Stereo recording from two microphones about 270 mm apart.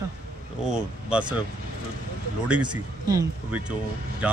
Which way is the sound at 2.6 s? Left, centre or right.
Centre.